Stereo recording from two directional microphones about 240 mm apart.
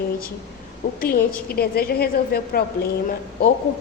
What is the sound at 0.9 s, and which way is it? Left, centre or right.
A woman's voice, left.